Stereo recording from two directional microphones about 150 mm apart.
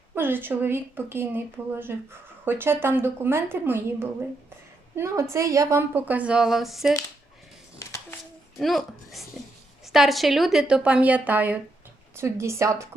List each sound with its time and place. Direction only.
0.1 s a woman's voice: 15° right (ahead or behind)
7.8 s a sound: 20° left (ahead or behind)
8.5 s a woman's voice: centre (ahead or behind); by 12.9 s 20° right (ahead or behind)